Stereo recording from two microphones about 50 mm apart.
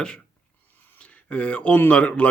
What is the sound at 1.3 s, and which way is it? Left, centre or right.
Speech, left.